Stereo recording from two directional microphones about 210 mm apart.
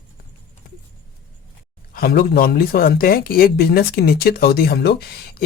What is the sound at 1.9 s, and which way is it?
Speech, 45° left (ahead or behind).